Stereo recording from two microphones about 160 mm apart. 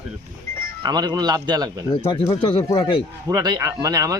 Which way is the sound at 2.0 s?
30° left (ahead or behind).